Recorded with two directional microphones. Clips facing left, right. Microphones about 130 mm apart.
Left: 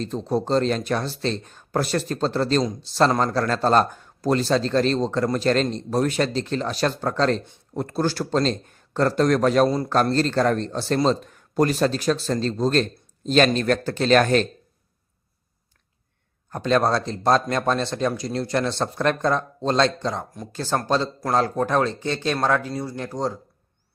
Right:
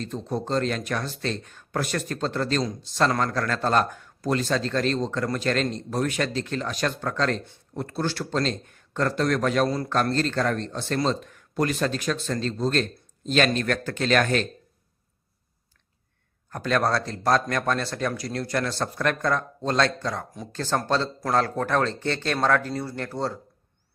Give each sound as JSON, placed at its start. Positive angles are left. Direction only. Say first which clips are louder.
{"t": 0.0, "sound": "speech", "louder": "left 5 dB", "side_deg": 35}
{"t": 16.5, "sound": "speech", "louder": "left 4 dB", "side_deg": 25}
{"t": 20.5, "sound": "speech", "louder": "left 2 dB", "side_deg": 10}